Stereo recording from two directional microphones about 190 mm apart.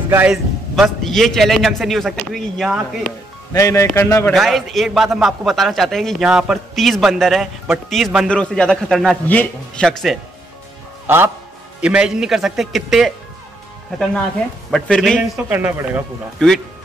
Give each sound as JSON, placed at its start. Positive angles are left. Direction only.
{"t": 0.1, "sound": "speech", "side_deg": -10}
{"t": 0.7, "sound": "a man's voice", "side_deg": 0}
{"t": 3.5, "sound": "speech", "side_deg": 15}
{"t": 4.3, "sound": "a man's voice", "side_deg": 0}
{"t": 11.1, "sound": "a man's voice", "side_deg": -10}
{"t": 14.7, "sound": "a man's voice", "side_deg": 5}
{"t": 15.5, "sound": "speech", "side_deg": -10}
{"t": 16.3, "sound": "a man's voice", "side_deg": 0}